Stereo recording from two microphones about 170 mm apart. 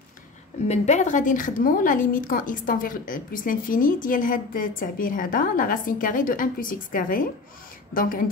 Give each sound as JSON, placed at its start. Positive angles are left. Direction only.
{"t": 0.7, "sound": "a woman's voice", "side_deg": 45}